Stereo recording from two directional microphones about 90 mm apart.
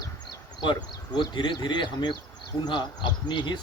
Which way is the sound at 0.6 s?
55° left (ahead or behind).